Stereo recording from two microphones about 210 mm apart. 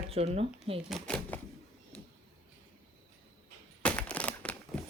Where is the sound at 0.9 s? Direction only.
5° left (ahead or behind).